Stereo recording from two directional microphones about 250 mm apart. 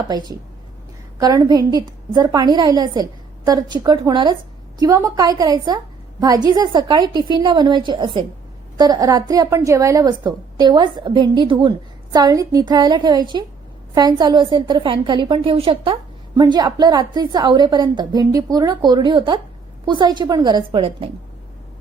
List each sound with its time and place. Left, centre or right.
0.1 s a woman's voice: centre